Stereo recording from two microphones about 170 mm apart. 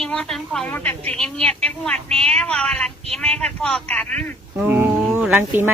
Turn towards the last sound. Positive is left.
turn(degrees=-10)  # may be behind; listen again after turning